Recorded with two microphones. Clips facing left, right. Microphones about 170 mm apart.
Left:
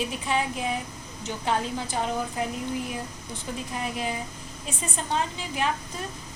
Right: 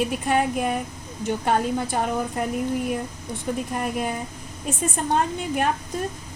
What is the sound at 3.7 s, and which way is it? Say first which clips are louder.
A woman's voice: right 4 dB; 50° right (ahead or behind).